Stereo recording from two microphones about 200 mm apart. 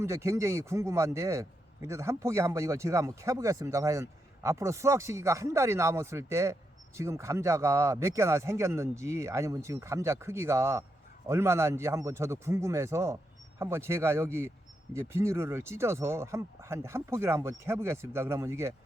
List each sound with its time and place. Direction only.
0.0 s a man's voice: 15° right (ahead or behind)